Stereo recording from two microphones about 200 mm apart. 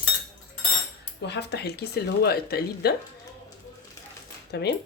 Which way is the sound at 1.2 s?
60° left (ahead or behind).